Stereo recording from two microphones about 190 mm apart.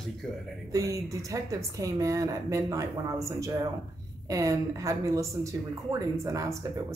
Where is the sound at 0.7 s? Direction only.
15° right (ahead or behind).